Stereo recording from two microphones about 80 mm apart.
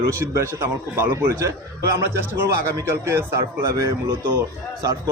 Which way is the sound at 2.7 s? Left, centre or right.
Right.